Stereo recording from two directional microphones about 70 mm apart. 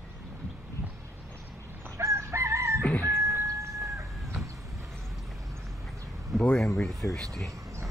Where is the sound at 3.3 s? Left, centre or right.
Right.